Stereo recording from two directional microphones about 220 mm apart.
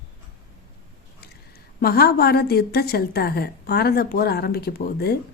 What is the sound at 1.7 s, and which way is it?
Speech, 45° left (ahead or behind).